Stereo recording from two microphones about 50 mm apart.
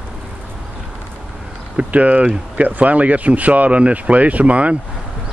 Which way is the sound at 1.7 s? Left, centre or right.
Right.